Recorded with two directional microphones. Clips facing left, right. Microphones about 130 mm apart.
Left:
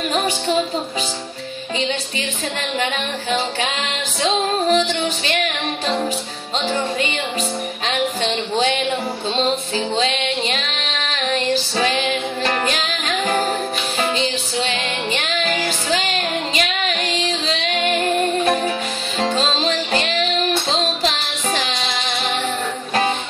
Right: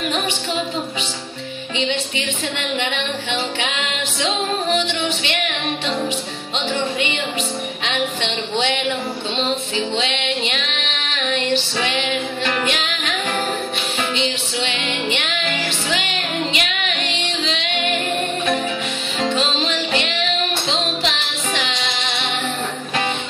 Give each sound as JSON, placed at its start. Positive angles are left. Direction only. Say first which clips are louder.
{"t": 1.8, "sound": "music", "louder": "right 2 dB", "side_deg": 40}
{"t": 4.7, "sound": "music", "louder": "left 2 dB", "side_deg": 40}
{"t": 6.7, "sound": "music", "louder": "even", "side_deg": 40}
{"t": 9.8, "sound": "music", "louder": "left 2 dB", "side_deg": 35}
{"t": 14.1, "sound": "music", "louder": "left 1 dB", "side_deg": 35}